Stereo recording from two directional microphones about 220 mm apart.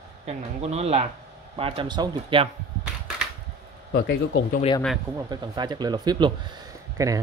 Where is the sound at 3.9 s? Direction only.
45° left (ahead or behind).